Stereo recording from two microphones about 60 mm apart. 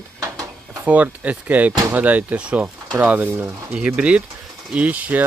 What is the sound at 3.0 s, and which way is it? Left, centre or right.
Speech, right.